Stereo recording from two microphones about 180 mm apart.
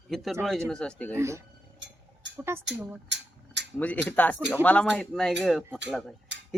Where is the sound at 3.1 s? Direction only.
80° right.